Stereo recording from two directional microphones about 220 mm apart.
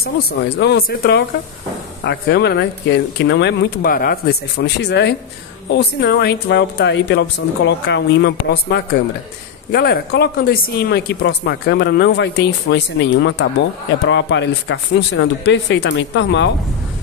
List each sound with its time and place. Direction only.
0.6 s speech: 45° left (ahead or behind)